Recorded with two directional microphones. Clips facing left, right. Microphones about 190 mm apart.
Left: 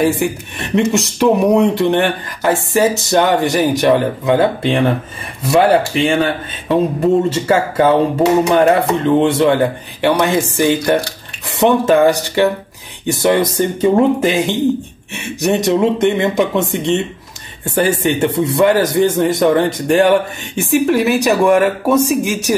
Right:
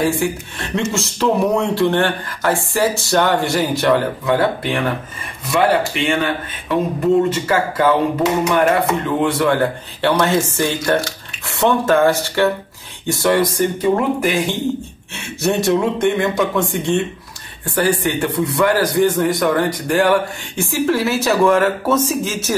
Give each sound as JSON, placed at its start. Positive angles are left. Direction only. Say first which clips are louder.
{"t": 0.0, "sound": "speech", "louder": "left 3 dB", "side_deg": 20}
{"t": 7.3, "sound": "speech", "louder": "left 4 dB", "side_deg": 25}